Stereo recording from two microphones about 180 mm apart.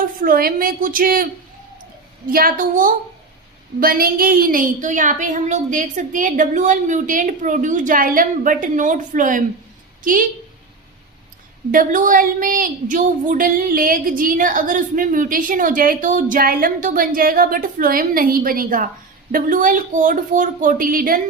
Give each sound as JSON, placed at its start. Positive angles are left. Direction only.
{"t": 0.0, "sound": "a woman's voice", "side_deg": -50}
{"t": 2.3, "sound": "a woman's voice", "side_deg": -50}
{"t": 11.7, "sound": "a woman's voice", "side_deg": -45}